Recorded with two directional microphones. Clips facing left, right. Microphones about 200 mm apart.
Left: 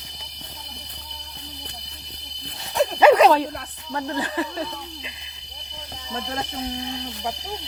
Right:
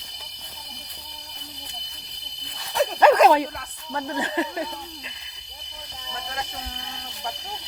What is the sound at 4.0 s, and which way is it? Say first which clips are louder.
Speech: even; 20° right (ahead or behind).